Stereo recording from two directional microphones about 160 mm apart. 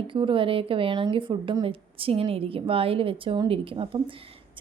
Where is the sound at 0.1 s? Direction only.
30° right (ahead or behind).